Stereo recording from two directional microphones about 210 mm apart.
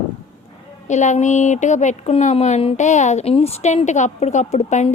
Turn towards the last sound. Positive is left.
turn(degrees=35)  # may be behind; listen again after turning